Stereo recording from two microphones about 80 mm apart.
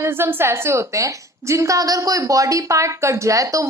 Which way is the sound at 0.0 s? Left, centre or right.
Right.